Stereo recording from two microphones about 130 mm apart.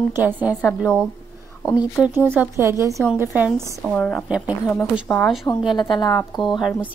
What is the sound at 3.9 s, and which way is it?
A woman's voice, 10° left (ahead or behind).